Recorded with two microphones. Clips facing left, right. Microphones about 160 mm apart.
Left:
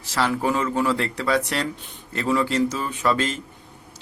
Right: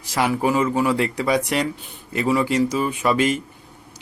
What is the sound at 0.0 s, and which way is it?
Speech, 15° right (ahead or behind).